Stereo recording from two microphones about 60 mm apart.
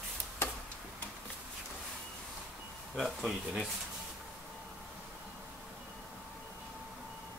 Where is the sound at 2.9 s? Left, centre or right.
Centre.